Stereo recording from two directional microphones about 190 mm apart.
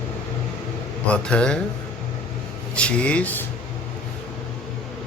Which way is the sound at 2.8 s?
5° left (ahead or behind).